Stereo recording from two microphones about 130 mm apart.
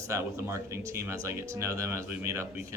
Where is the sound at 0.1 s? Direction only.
20° right (ahead or behind).